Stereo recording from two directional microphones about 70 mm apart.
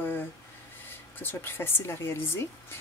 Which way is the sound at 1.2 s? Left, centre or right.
Left.